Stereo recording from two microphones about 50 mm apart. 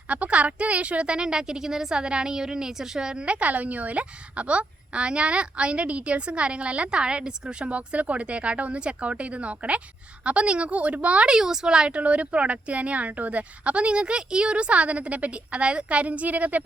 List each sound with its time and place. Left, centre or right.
0.1 s a woman's voice: right
7.7 s a woman's voice: right
11.3 s a woman's voice: centre; by 16.6 s right